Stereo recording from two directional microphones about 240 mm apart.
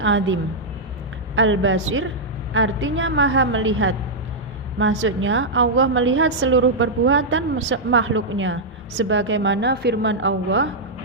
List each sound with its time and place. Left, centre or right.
0.0 s a woman's voice: right
1.4 s a woman's voice: right